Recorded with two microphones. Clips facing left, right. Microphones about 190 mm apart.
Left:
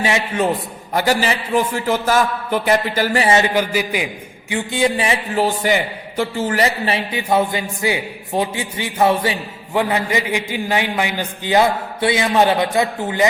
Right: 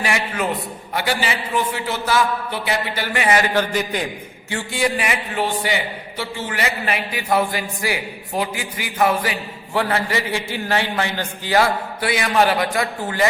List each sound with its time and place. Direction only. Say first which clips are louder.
0.0 s a man's voice: left 4 dB; 25° left (ahead or behind)
0.9 s a man's voice: left 5 dB; 40° left (ahead or behind)
3.5 s a man's voice: left 2 dB; 10° left (ahead or behind); by 5.2 s 25° left (ahead or behind)
5.3 s a man's voice: left 6 dB; 40° left (ahead or behind)
6.8 s a man's voice: left 3 dB; 25° left (ahead or behind)